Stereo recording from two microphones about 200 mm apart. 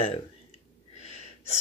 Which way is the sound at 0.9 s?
35° left (ahead or behind).